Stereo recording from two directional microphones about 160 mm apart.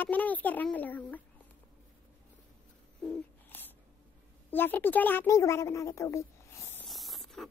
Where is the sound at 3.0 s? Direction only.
10° left (ahead or behind).